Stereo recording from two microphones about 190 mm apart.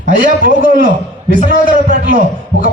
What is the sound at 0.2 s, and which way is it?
A man's voice, 45° right (ahead or behind).